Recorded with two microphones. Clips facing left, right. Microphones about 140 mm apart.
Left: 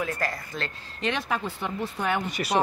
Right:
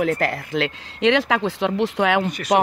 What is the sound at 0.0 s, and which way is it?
Speech, 70° right (ahead or behind).